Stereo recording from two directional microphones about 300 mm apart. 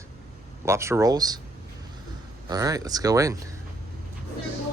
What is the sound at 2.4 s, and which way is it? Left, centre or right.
Speech, centre.